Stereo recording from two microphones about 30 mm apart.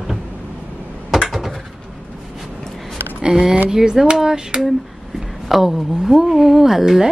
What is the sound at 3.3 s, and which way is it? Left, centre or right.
Speech, right.